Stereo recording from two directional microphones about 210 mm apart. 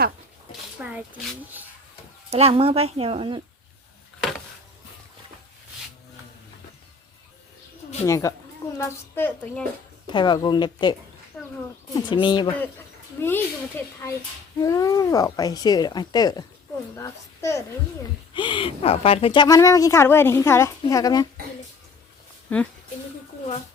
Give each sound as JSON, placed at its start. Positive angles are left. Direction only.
{"t": 0.8, "sound": "speech", "side_deg": -5}
{"t": 2.3, "sound": "speech", "side_deg": -30}
{"t": 8.0, "sound": "speech", "side_deg": 15}
{"t": 10.1, "sound": "speech", "side_deg": 20}
{"t": 11.9, "sound": "speech", "side_deg": 20}
{"t": 13.1, "sound": "speech", "side_deg": 10}
{"t": 22.5, "sound": "speech", "side_deg": 5}